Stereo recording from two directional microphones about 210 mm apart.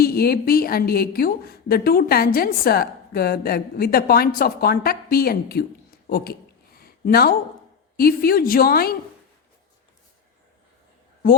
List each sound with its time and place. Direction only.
0.0 s a woman's voice: 45° left (ahead or behind)
6.7 s a sound: 45° left (ahead or behind)
7.9 s a woman's voice: 45° left (ahead or behind)